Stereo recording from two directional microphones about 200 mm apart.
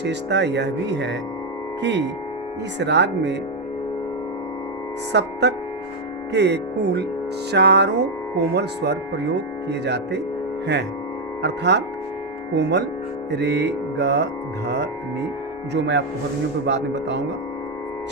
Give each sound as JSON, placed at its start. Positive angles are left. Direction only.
{"t": 0.0, "sound": "speech", "side_deg": -60}
{"t": 5.1, "sound": "speech", "side_deg": -60}
{"t": 11.4, "sound": "speech", "side_deg": -60}